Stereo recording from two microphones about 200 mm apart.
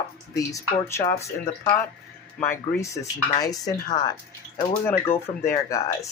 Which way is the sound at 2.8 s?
15° left (ahead or behind).